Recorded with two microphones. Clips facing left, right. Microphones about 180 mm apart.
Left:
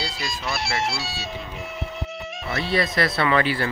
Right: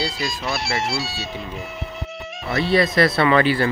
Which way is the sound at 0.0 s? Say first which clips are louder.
Right 5 dB; centre (ahead or behind).